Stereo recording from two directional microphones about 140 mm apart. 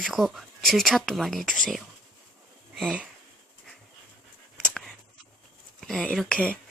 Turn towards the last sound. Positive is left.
turn(degrees=5)  # may be behind; listen again after turning